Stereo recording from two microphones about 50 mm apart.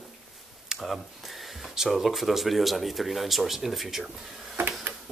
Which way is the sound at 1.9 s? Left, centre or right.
Centre.